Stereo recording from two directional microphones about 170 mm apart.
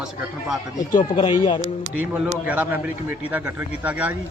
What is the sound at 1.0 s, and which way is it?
Speech, 30° left (ahead or behind).